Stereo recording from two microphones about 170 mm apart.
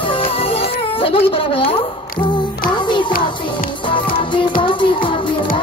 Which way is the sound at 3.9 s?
30° left (ahead or behind).